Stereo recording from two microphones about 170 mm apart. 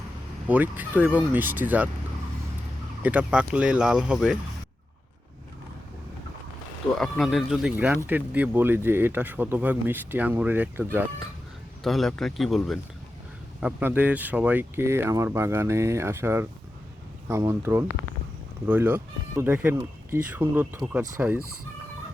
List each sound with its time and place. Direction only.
0.4 s speech: 10° right (ahead or behind)
3.0 s speech: 10° right (ahead or behind)
7.0 s speech: centre (ahead or behind)
11.8 s speech: centre (ahead or behind)
19.7 s speech: 20° right (ahead or behind)
20.1 s speech: 10° right (ahead or behind)